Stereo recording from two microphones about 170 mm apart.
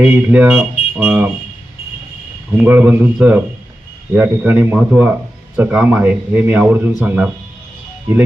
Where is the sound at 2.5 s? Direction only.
10° right (ahead or behind).